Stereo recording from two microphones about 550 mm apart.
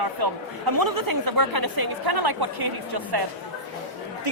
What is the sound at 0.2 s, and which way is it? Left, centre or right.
Speech, right.